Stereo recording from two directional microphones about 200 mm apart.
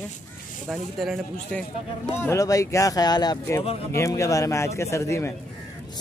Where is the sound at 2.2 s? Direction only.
15° left (ahead or behind).